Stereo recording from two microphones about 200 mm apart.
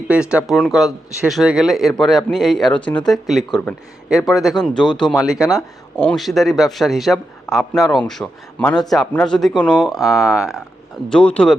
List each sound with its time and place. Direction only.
0.1 s a man's voice: 5° right (ahead or behind)